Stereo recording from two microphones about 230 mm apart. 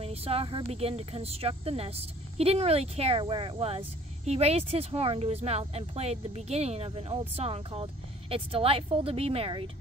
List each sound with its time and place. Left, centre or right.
0.0 s speech: right